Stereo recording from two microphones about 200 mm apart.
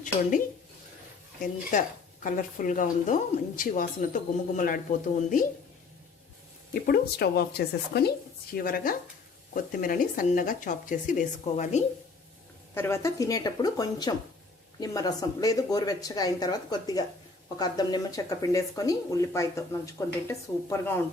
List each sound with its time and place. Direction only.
0.0 s speech: 40° left (ahead or behind)
2.2 s speech: 40° left (ahead or behind)
6.8 s speech: 50° left (ahead or behind)
12.7 s speech: 10° left (ahead or behind)